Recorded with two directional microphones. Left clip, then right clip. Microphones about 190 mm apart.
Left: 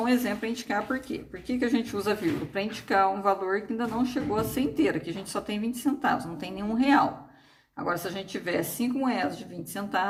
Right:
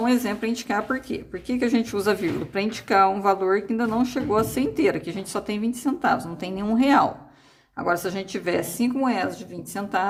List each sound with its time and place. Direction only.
0.0 s a woman's voice: 30° right (ahead or behind)